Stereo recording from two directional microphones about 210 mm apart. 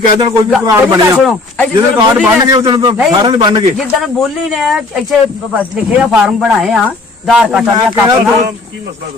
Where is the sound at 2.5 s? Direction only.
20° right (ahead or behind).